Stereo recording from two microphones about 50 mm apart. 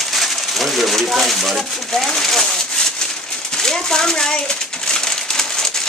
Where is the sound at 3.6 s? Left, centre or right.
Centre.